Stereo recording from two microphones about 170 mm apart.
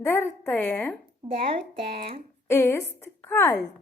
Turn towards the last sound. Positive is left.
turn(degrees=15)  # may be behind; listen again after turning